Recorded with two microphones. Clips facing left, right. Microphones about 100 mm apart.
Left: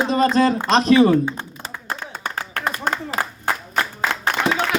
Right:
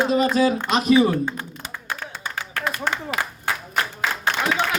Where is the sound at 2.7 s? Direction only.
40° left (ahead or behind).